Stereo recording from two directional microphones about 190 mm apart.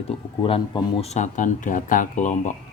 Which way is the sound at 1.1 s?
40° left (ahead or behind).